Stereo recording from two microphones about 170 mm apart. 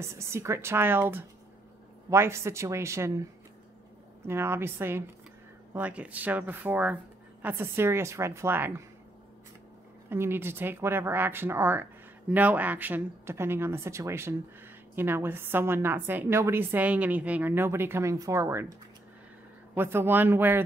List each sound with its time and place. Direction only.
0.0 s speech: 15° right (ahead or behind)
4.3 s speech: 15° right (ahead or behind)
10.0 s speech: 15° right (ahead or behind)
19.7 s speech: 15° right (ahead or behind)